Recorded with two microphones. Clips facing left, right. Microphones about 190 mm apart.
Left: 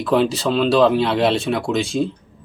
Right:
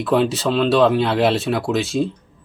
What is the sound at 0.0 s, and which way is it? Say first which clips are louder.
Speech: even; centre (ahead or behind).